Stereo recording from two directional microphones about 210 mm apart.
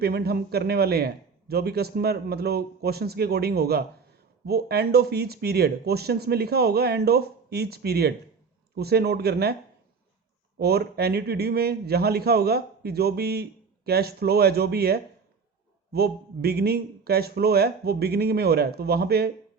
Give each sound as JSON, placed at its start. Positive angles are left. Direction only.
{"t": 0.0, "sound": "a man's voice", "side_deg": -50}
{"t": 10.6, "sound": "a man's voice", "side_deg": -50}